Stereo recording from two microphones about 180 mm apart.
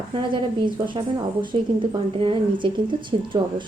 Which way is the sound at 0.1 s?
25° right (ahead or behind).